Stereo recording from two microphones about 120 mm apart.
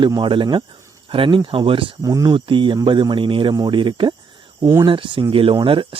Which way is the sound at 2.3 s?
45° right (ahead or behind).